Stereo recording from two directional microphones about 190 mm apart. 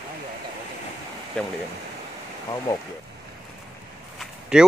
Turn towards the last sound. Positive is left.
turn(degrees=-5)  # may be behind; listen again after turning